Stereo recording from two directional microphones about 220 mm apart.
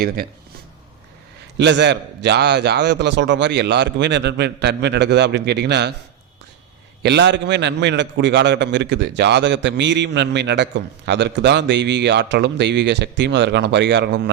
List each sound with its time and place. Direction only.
1.5 s a man's voice: 55° right (ahead or behind)
7.0 s a man's voice: 50° right (ahead or behind)